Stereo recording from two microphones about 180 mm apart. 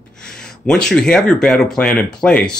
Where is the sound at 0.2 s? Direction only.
5° left (ahead or behind).